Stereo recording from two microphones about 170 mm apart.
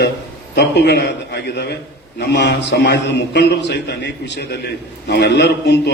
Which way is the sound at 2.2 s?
75° left (ahead or behind).